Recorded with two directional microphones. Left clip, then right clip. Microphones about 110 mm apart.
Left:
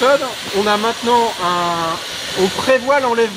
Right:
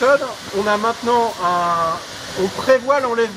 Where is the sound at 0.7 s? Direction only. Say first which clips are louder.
Left 1 dB; 40° left (ahead or behind).